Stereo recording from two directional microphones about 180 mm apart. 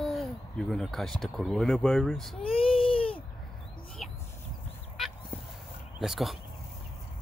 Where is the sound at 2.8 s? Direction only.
30° left (ahead or behind).